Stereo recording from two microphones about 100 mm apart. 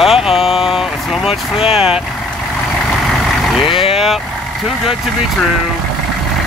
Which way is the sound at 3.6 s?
65° left (ahead or behind).